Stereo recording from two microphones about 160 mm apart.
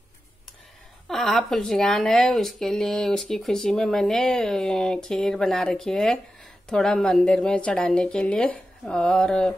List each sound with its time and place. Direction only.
1.0 s a woman's voice: centre (ahead or behind)